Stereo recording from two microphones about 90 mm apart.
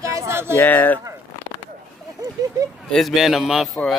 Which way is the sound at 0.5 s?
20° left (ahead or behind).